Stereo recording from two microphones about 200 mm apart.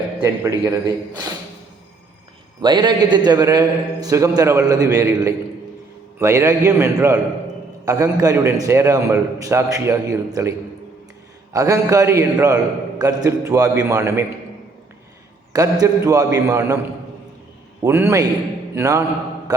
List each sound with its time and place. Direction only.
0.2 s a man's voice: 15° right (ahead or behind)
2.6 s a man's voice: 20° right (ahead or behind)
11.5 s a man's voice: 15° right (ahead or behind)
15.5 s a man's voice: 15° right (ahead or behind)
17.8 s a man's voice: 15° right (ahead or behind)